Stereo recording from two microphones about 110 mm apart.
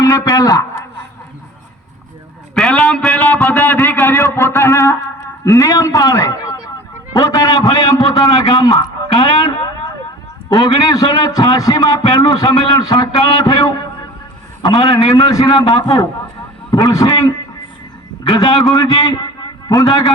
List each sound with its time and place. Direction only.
0.0 s a man's voice: 35° left (ahead or behind)
2.6 s a sound: 5° left (ahead or behind)
3.4 s music: 20° left (ahead or behind)
5.5 s a man's voice: 30° left (ahead or behind)
10.5 s a man's voice: 35° left (ahead or behind)
15.8 s a man's voice: 35° left (ahead or behind)
18.7 s a man's voice: 40° left (ahead or behind)